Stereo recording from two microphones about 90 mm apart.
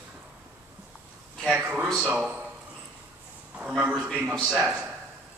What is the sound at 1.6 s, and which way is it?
Speech, 15° right (ahead or behind).